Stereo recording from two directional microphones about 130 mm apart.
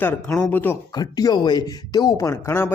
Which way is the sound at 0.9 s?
30° left (ahead or behind).